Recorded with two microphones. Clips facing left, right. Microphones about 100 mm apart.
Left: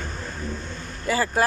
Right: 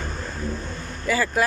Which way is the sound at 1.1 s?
35° left (ahead or behind).